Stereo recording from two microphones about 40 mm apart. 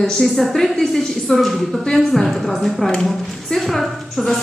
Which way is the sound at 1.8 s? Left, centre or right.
Centre.